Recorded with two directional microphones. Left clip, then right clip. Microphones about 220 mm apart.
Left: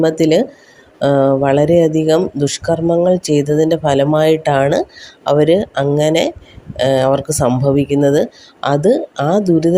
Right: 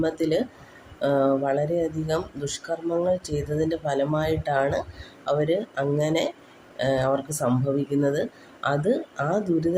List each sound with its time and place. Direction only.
0.0 s speech: 35° left (ahead or behind)